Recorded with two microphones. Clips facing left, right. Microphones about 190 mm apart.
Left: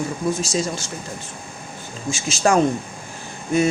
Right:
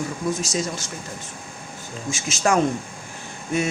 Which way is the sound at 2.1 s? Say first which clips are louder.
Left 3 dB; 30° left (ahead or behind).